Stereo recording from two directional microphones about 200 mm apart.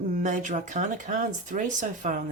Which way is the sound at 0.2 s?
35° right (ahead or behind).